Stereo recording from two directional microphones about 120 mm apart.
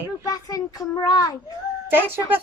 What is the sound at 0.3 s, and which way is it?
A child's voice, 30° left (ahead or behind).